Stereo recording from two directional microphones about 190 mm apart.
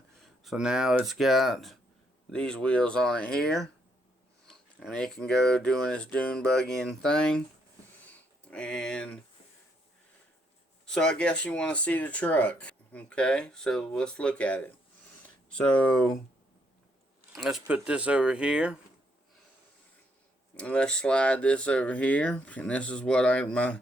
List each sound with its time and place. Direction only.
0.2 s speech: centre (ahead or behind)
8.0 s a sound: 5° left (ahead or behind)
10.8 s speech: 5° left (ahead or behind)
17.3 s speech: centre (ahead or behind)
20.6 s speech: 5° left (ahead or behind)